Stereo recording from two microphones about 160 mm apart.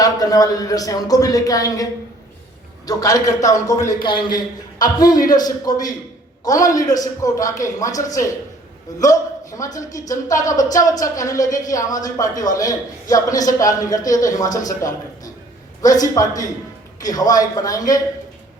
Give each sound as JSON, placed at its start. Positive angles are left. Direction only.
{"t": 0.0, "sound": "a man's voice", "side_deg": 25}